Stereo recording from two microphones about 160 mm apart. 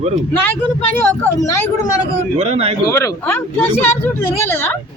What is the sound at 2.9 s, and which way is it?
Speech, 15° left (ahead or behind).